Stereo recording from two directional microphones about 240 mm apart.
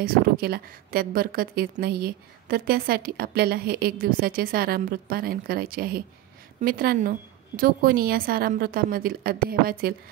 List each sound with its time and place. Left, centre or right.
0.0 s a woman's voice: right